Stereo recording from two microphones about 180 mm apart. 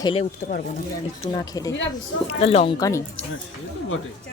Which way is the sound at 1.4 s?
20° left (ahead or behind).